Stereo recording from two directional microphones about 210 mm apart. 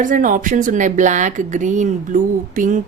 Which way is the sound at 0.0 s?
40° right (ahead or behind).